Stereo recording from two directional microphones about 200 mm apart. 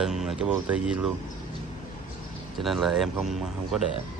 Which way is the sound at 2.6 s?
Centre (ahead or behind).